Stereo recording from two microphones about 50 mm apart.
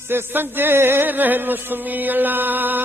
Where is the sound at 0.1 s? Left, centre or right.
Right.